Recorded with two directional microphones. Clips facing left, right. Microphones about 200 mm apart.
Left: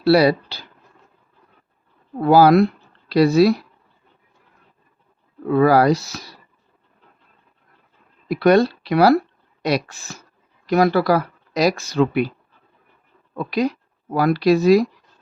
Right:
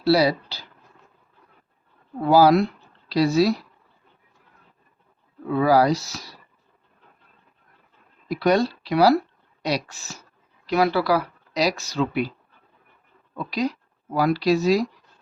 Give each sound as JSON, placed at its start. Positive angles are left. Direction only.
{"t": 0.0, "sound": "speech", "side_deg": 60}
{"t": 2.2, "sound": "speech", "side_deg": 55}
{"t": 5.5, "sound": "speech", "side_deg": 60}
{"t": 8.3, "sound": "speech", "side_deg": 60}
{"t": 13.3, "sound": "speech", "side_deg": 55}